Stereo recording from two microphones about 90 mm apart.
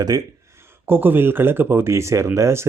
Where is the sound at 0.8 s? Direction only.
25° right (ahead or behind).